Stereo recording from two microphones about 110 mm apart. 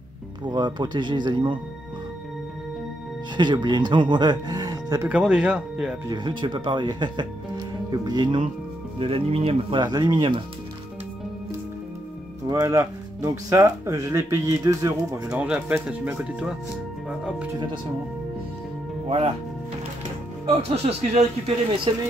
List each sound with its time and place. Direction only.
0.5 s speech: 40° right (ahead or behind)
3.3 s speech: 45° right (ahead or behind)
5.0 s speech: 10° right (ahead or behind)
6.0 s speech: 45° right (ahead or behind)
9.0 s speech: 60° right (ahead or behind)
9.8 s speech: 40° right (ahead or behind)
12.4 s speech: 30° right (ahead or behind)
15.2 s speech: 10° right (ahead or behind)
19.0 s speech: 60° right (ahead or behind)
20.6 s a man's voice: 70° right (ahead or behind)